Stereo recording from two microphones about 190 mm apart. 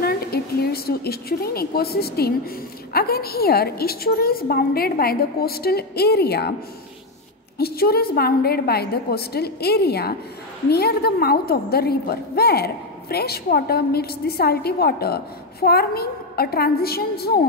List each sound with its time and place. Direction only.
0.0 s a woman's voice: 55° left (ahead or behind)
7.5 s a woman's voice: 55° left (ahead or behind)